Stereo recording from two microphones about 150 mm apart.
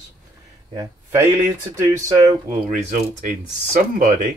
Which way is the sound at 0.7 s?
20° right (ahead or behind).